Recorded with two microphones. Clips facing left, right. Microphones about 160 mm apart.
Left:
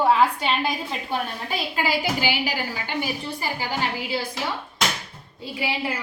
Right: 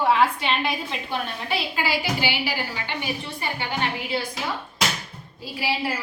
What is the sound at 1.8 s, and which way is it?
Speech, 45° left (ahead or behind).